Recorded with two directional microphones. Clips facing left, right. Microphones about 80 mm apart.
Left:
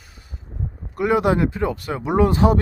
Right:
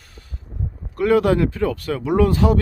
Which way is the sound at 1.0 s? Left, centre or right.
Centre.